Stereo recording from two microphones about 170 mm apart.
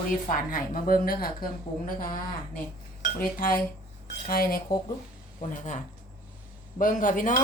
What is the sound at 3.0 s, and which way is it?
Speech, 55° left (ahead or behind).